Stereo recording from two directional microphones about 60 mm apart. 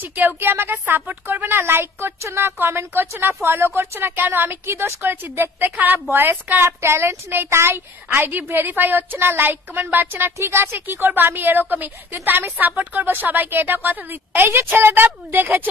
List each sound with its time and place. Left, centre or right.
0.0 s a woman's voice: right
10.3 s a woman's voice: right